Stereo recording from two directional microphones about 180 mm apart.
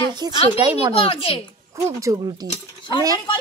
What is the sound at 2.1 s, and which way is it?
Speech, 20° right (ahead or behind).